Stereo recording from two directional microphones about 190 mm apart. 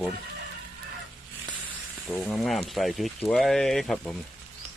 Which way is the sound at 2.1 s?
5° left (ahead or behind).